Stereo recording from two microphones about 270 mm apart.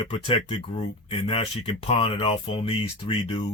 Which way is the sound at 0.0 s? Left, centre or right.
Centre.